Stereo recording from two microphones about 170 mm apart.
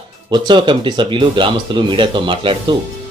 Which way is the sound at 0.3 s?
25° right (ahead or behind).